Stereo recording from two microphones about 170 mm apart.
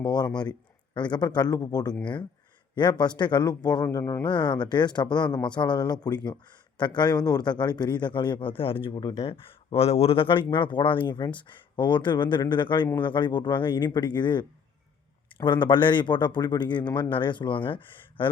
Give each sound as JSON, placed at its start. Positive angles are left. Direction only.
{"t": 0.0, "sound": "speech", "side_deg": 25}
{"t": 3.0, "sound": "speech", "side_deg": 25}